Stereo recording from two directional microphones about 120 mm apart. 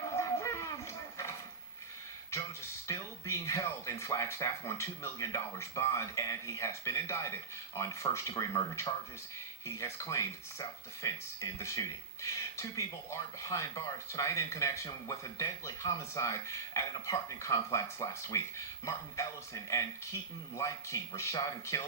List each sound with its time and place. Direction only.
0.2 s a sound: 25° left (ahead or behind)
2.3 s speech: 25° left (ahead or behind)
20.6 s speech: 25° left (ahead or behind)